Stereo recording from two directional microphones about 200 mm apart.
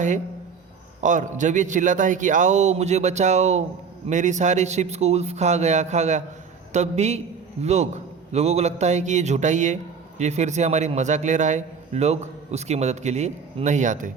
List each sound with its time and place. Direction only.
1.0 s a man's voice: 40° right (ahead or behind)